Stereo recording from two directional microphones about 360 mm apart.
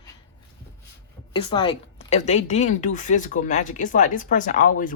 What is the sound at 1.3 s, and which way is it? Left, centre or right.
A woman's voice, centre.